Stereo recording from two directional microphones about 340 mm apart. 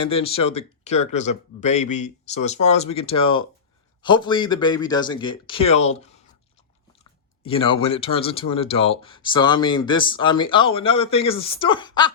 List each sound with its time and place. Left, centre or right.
0.0 s speech: centre